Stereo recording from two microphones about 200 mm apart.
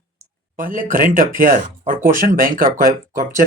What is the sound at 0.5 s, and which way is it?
Speech, 40° right (ahead or behind).